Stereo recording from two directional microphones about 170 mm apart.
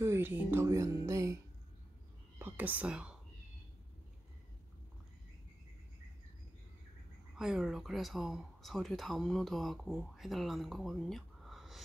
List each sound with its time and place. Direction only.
0.0 s speech: 15° right (ahead or behind)
7.3 s speech: 5° right (ahead or behind)